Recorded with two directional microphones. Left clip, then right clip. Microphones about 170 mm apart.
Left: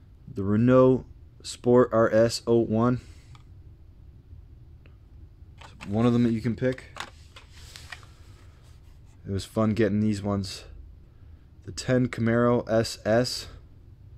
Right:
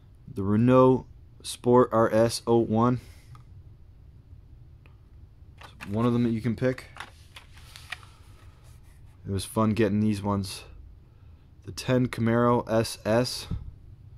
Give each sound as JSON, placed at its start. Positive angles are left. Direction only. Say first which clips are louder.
{"t": 0.3, "sound": "speech", "louder": "left 1 dB", "side_deg": -10}
{"t": 5.6, "sound": "speech", "louder": "left 2 dB", "side_deg": 0}
{"t": 6.5, "sound": "speech", "louder": "even", "side_deg": -25}
{"t": 7.7, "sound": "a sound", "louder": "left 1 dB", "side_deg": 40}
{"t": 9.2, "sound": "speech", "louder": "even", "side_deg": -10}